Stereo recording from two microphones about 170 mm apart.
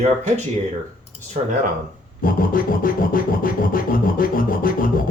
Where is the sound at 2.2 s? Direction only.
55° left (ahead or behind).